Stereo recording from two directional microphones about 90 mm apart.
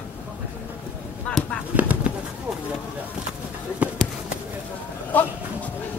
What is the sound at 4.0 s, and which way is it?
Run, 5° left (ahead or behind).